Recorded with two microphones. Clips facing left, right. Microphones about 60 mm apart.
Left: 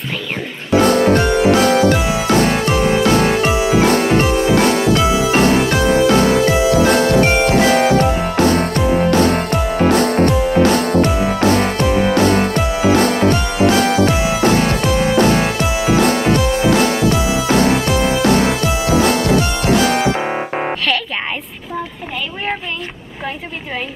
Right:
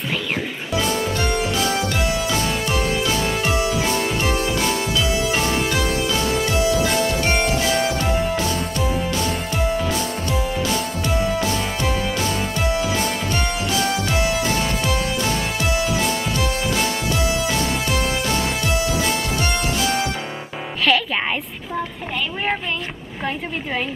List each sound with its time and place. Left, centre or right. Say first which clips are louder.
0.7 s music: left 10 dB; left
2.3 s music: left 7 dB; left
4.4 s music: left 9 dB; left
4.6 s music: left 8 dB; left